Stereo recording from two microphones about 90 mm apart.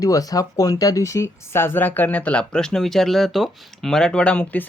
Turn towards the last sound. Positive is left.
turn(degrees=15)  # may be behind; listen again after turning